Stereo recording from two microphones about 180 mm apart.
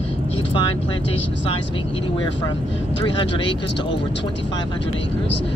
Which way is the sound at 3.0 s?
30° left (ahead or behind).